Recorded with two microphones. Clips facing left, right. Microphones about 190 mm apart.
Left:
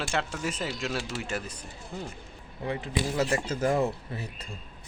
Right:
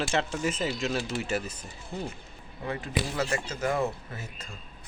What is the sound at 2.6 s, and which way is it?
A man's voice, 25° left (ahead or behind).